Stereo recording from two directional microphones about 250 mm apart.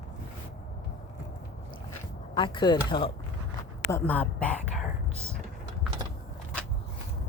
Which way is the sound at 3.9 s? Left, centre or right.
Centre.